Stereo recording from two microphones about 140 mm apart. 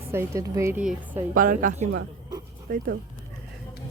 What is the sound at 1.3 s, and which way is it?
A woman's voice, 75° right (ahead or behind).